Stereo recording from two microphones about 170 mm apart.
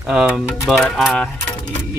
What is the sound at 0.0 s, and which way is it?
Speech, 5° right (ahead or behind).